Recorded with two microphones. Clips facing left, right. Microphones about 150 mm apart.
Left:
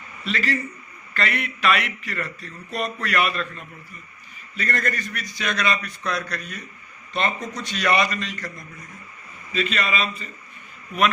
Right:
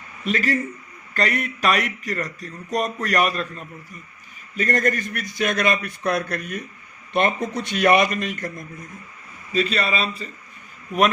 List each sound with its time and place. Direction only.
0.3 s speech: 50° right (ahead or behind)
9.5 s speech: 40° right (ahead or behind)